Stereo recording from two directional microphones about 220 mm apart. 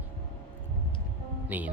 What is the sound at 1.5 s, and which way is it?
Speech, 5° right (ahead or behind).